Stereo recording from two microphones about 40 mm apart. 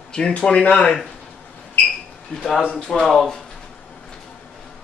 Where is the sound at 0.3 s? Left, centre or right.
Left.